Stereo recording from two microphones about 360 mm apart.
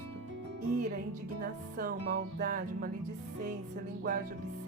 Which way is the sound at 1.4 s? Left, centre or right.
Right.